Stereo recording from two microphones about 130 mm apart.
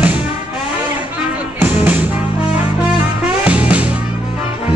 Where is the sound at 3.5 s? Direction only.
10° right (ahead or behind).